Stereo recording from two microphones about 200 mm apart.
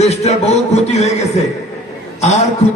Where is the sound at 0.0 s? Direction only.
35° left (ahead or behind).